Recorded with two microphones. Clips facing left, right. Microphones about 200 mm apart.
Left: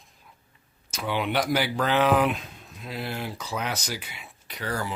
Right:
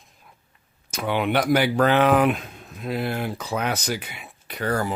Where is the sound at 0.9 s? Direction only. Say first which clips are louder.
Right 4 dB; 55° right (ahead or behind).